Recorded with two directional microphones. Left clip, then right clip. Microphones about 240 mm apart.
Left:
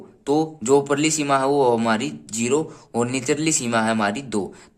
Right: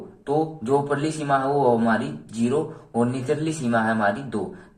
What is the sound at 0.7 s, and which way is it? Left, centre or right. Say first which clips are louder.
Speech: left 6 dB; left.